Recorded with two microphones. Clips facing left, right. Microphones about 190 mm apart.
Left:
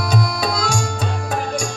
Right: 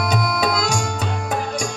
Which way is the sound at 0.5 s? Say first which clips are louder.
Even; 20° right (ahead or behind).